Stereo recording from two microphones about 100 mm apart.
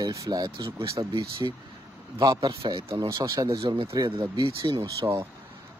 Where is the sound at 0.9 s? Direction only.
60° right (ahead or behind).